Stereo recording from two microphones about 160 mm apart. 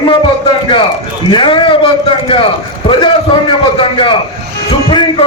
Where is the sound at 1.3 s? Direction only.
30° left (ahead or behind).